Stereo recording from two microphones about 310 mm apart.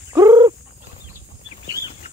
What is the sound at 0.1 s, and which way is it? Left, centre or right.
Wild animals, centre.